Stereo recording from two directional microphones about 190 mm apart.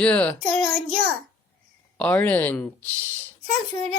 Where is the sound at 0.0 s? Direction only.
5° left (ahead or behind).